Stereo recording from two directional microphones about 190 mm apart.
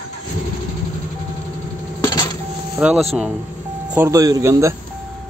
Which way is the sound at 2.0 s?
20° left (ahead or behind).